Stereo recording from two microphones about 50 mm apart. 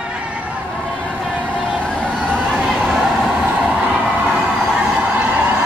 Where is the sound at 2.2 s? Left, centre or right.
Centre.